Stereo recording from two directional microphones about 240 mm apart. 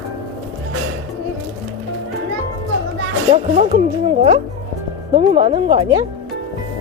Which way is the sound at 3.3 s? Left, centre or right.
Right.